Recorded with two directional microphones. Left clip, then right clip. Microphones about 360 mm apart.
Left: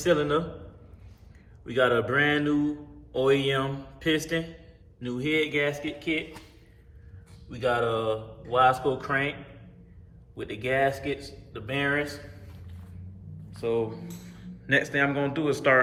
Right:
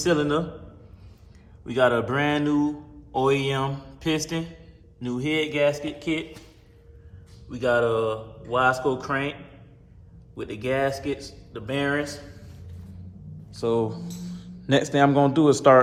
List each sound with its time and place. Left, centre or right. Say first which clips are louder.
0.0 s mantra: right 1 dB; centre
1.6 s mantra: right 2 dB; centre
7.5 s mantra: right 4 dB; centre
10.3 s speech: right 1 dB; centre
13.6 s speech: right 3 dB; centre
14.9 s speech: right 7 dB; centre